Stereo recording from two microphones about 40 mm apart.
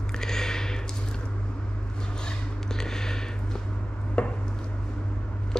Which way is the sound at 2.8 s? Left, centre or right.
Centre.